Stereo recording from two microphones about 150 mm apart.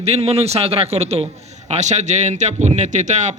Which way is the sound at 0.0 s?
45° right (ahead or behind).